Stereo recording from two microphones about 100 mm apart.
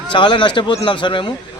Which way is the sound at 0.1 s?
55° left (ahead or behind).